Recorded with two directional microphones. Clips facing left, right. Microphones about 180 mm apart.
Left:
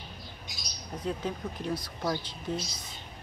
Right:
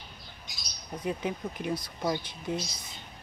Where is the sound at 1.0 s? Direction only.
15° right (ahead or behind).